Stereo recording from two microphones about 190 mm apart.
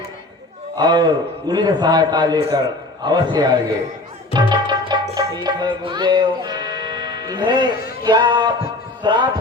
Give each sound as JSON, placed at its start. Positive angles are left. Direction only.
{"t": 0.8, "sound": "a man's voice", "side_deg": -20}
{"t": 4.4, "sound": "music", "side_deg": -20}
{"t": 8.0, "sound": "a man's voice", "side_deg": -25}